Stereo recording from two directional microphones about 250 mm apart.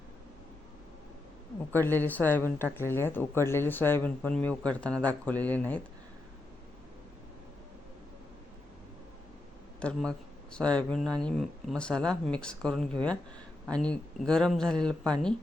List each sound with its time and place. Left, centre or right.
1.7 s speech: centre
9.8 s speech: centre